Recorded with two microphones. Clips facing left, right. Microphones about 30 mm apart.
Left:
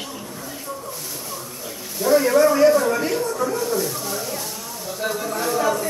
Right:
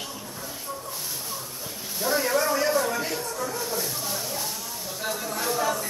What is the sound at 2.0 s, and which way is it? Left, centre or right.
Speech, centre.